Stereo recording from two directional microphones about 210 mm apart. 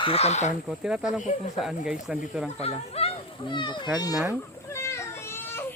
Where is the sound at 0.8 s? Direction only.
5° right (ahead or behind).